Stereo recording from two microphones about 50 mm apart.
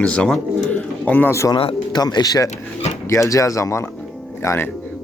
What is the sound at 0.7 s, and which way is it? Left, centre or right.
Bird, left.